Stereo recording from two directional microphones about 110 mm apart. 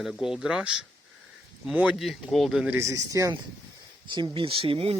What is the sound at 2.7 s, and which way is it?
Speech, 30° right (ahead or behind).